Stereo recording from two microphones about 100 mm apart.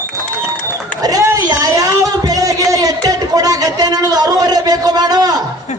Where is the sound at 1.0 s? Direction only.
40° right (ahead or behind).